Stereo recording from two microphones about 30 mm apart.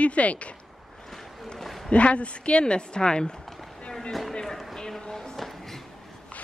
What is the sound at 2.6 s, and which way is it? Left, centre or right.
Speech, left.